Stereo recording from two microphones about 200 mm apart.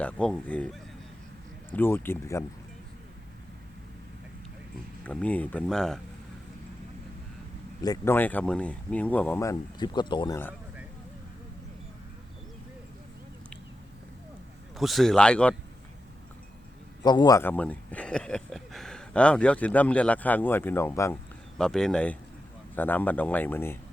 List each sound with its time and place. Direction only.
0.0 s speech: 5° left (ahead or behind)
5.0 s speech: 5° left (ahead or behind)
7.8 s speech: 15° left (ahead or behind)
14.8 s speech: centre (ahead or behind)
17.0 s speech: 20° left (ahead or behind)